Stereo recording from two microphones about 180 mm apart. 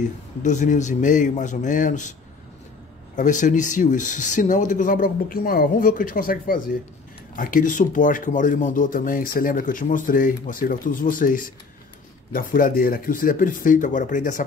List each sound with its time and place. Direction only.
0.4 s speech: 45° left (ahead or behind)
3.2 s speech: 45° left (ahead or behind)